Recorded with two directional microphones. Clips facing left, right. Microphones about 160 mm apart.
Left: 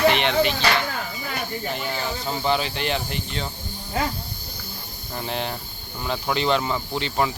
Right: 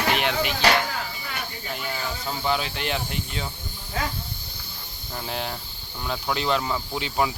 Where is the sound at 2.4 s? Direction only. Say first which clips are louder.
Left 2 dB; centre (ahead or behind).